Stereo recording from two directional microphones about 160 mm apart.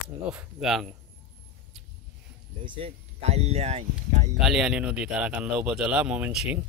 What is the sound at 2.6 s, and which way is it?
Speech, 40° right (ahead or behind).